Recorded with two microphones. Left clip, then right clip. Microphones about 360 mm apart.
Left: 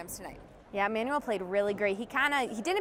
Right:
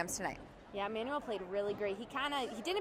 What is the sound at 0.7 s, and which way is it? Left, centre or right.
Speech, left.